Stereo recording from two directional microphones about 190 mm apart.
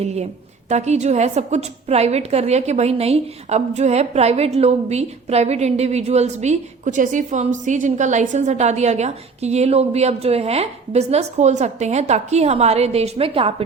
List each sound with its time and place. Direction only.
0.0 s a woman's voice: 35° right (ahead or behind)